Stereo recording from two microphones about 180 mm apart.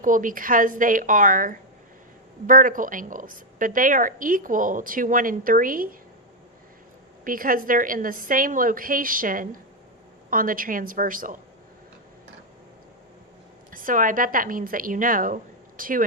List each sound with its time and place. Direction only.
0.0 s a woman's voice: 45° right (ahead or behind)
7.3 s a woman's voice: 50° right (ahead or behind)
13.7 s a woman's voice: 50° right (ahead or behind)